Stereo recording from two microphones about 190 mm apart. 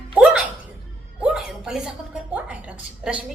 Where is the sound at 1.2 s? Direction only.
5° right (ahead or behind).